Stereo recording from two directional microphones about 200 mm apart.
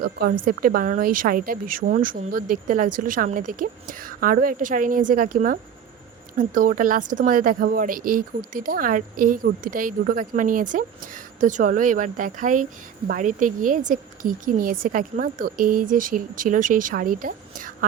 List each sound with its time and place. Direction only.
0.0 s a woman's voice: 45° right (ahead or behind)